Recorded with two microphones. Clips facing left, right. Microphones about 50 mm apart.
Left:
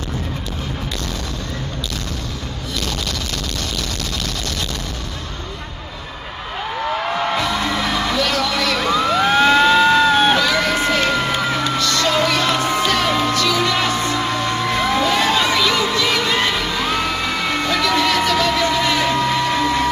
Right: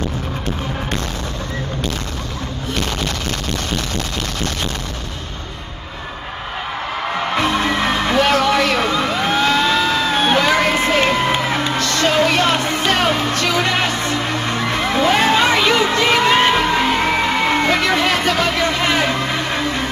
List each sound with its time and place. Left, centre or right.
7.3 s music: right
9.5 s music: centre
10.3 s music: right